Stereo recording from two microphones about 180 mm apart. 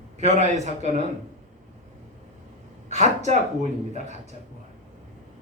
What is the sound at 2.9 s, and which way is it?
Speech, 40° right (ahead or behind).